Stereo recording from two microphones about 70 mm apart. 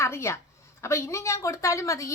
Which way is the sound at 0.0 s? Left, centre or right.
Left.